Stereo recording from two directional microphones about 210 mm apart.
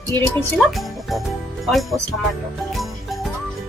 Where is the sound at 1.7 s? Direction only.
Centre (ahead or behind).